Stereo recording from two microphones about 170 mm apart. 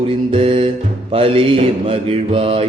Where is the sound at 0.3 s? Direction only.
35° right (ahead or behind).